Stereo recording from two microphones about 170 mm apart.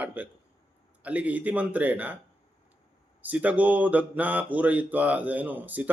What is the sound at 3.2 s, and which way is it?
Speech, 10° right (ahead or behind).